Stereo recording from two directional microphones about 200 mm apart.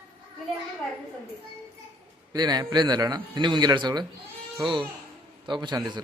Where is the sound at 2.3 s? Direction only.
20° right (ahead or behind).